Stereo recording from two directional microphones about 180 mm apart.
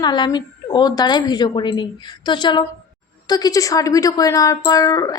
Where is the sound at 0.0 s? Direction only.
25° left (ahead or behind).